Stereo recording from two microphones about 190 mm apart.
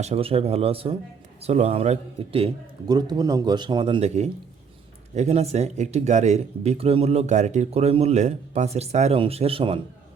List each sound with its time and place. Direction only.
0.0 s a man's voice: 30° right (ahead or behind)